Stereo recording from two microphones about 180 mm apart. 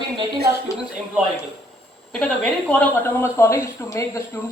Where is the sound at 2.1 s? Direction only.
5° left (ahead or behind).